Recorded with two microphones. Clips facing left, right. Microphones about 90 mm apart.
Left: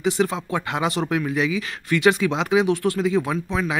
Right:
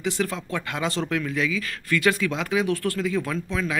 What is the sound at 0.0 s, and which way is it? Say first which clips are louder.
Speech: left 5 dB; 20° left (ahead or behind).